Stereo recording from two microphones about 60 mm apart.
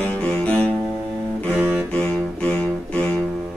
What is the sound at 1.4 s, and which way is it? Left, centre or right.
Music, right.